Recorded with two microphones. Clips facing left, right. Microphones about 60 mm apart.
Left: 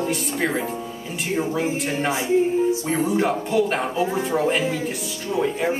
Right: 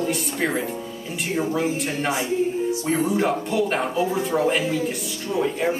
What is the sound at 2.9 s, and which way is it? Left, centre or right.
Speech, centre.